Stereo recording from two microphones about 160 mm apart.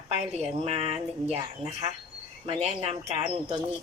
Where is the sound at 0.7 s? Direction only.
50° left (ahead or behind).